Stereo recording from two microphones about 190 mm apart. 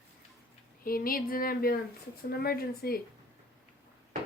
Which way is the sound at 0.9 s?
50° left (ahead or behind).